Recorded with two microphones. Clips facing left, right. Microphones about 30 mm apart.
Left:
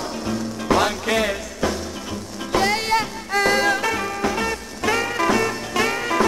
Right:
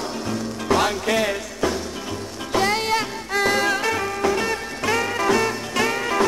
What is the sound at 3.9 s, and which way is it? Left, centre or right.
Music, centre.